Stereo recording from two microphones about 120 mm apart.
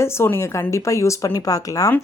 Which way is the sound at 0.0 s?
20° left (ahead or behind).